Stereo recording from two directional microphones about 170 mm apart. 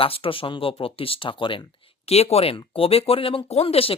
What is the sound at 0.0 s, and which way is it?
Speech, 30° left (ahead or behind).